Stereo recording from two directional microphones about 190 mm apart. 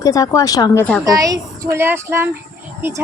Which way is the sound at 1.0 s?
20° right (ahead or behind).